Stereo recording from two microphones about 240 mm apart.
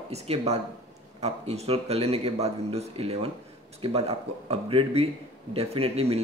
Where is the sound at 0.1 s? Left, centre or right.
Right.